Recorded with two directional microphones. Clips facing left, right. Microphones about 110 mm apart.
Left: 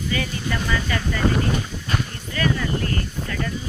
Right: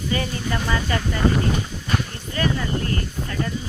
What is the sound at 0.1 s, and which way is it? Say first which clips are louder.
Speech: right 2 dB; 30° right (ahead or behind).